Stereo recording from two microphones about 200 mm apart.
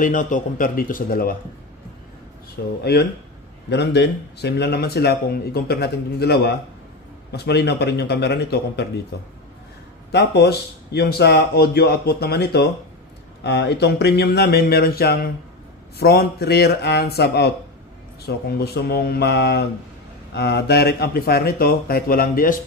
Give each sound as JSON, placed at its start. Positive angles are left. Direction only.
{"t": 0.0, "sound": "speech", "side_deg": 40}
{"t": 2.8, "sound": "a man's voice", "side_deg": 55}